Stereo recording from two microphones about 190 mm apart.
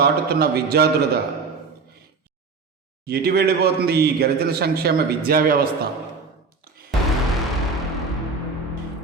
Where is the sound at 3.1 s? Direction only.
55° right (ahead or behind).